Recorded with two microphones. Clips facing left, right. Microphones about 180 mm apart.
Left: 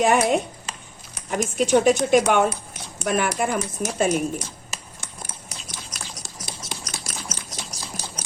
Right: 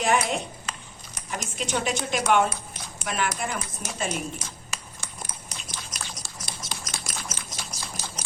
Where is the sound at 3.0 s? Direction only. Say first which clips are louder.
Left 6 dB; 50° left (ahead or behind).